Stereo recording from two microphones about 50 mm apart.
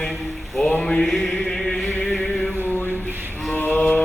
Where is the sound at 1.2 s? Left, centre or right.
Centre.